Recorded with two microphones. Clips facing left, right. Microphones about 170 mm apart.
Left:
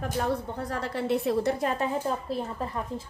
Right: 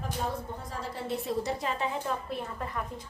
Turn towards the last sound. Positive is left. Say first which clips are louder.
# left 4 dB
turn(degrees=30)  # may be behind; listen again after turning